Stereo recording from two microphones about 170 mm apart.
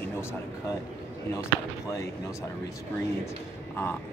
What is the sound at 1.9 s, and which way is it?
Speech, 20° left (ahead or behind).